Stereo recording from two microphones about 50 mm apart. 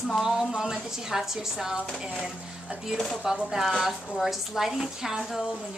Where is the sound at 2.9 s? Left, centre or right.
Centre.